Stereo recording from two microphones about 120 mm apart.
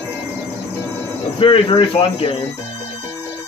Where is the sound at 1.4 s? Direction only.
45° left (ahead or behind).